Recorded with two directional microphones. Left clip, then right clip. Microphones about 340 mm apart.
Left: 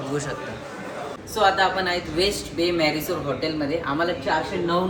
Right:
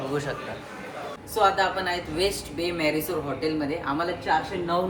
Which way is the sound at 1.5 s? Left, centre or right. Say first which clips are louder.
Left 3 dB; centre.